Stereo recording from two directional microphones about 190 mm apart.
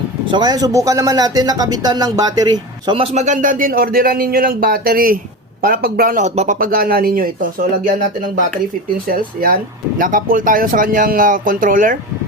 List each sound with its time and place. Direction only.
0.3 s speech: 25° right (ahead or behind); by 7.3 s 50° right (ahead or behind)
9.0 s speech: 50° right (ahead or behind)